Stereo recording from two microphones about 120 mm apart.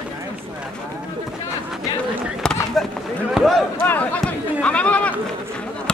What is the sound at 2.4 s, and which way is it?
Run, 5° left (ahead or behind).